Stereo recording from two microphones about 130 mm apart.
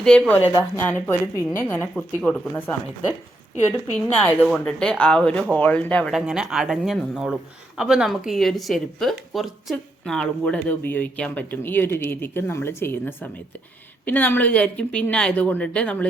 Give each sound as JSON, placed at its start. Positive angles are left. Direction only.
{"t": 0.0, "sound": "a woman's voice", "side_deg": 5}
{"t": 6.1, "sound": "a woman's voice", "side_deg": -5}